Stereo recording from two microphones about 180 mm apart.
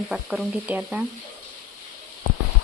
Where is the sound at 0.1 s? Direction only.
Centre (ahead or behind).